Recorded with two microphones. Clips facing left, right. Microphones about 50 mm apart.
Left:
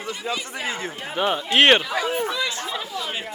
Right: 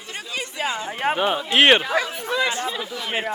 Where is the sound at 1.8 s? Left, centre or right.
Right.